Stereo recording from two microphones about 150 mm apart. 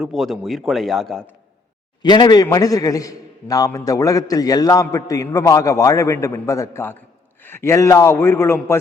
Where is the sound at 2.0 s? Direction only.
30° left (ahead or behind).